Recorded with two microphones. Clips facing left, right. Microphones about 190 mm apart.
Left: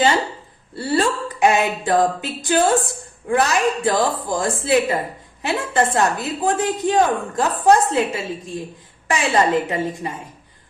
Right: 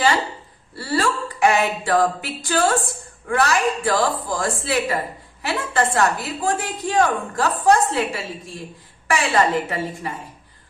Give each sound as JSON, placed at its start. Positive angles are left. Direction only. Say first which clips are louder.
{"t": 0.8, "sound": "a woman's voice", "louder": "left 3 dB", "side_deg": 20}